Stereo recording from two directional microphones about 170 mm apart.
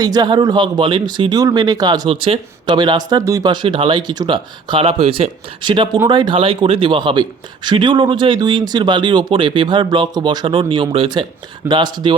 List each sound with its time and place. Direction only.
0.0 s speech: 25° right (ahead or behind)